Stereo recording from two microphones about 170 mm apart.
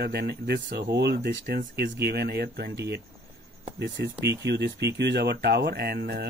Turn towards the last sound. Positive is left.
turn(degrees=-70)  # may be behind; listen again after turning